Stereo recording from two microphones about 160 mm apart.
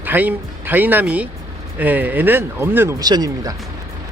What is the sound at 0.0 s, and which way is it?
Speech, 10° right (ahead or behind).